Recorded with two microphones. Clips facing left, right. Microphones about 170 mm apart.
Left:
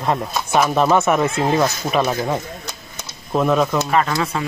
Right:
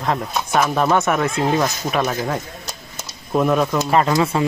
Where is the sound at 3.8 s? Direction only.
30° right (ahead or behind).